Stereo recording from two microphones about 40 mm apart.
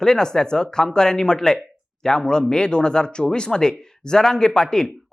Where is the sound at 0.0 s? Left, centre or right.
Centre.